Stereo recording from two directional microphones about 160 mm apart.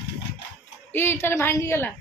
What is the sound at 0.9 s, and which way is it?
Speech, 15° left (ahead or behind).